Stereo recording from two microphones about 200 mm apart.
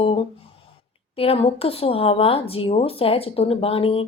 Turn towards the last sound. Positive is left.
turn(degrees=30)  # may be behind; listen again after turning